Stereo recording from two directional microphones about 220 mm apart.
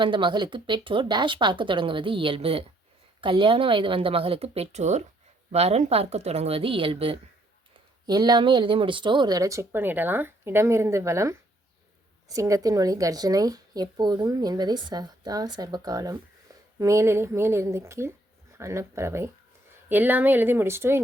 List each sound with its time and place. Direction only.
0.0 s speech: 20° right (ahead or behind)